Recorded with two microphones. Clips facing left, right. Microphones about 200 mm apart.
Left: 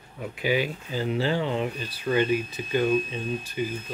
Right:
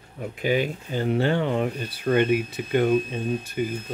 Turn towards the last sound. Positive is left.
turn(degrees=-50)  # may be behind; listen again after turning